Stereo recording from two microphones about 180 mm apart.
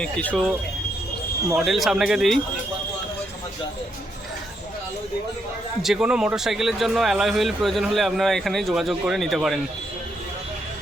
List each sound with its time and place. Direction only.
0.0 s speech: 5° left (ahead or behind)
5.8 s speech: 5° right (ahead or behind)